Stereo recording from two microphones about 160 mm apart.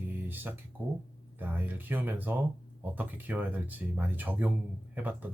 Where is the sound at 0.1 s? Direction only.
10° right (ahead or behind).